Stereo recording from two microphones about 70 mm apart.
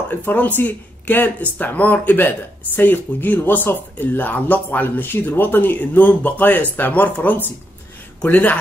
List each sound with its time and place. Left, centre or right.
0.1 s speech: left